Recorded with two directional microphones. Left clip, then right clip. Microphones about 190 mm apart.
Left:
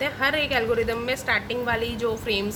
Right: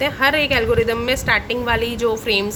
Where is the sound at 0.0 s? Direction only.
20° right (ahead or behind).